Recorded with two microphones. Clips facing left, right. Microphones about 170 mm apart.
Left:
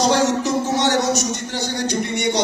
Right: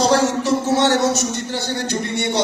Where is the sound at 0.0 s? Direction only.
15° left (ahead or behind).